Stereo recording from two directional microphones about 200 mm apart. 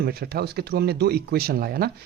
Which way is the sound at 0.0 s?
50° right (ahead or behind).